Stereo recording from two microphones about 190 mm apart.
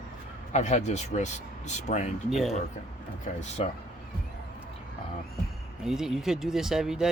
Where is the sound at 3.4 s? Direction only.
35° left (ahead or behind).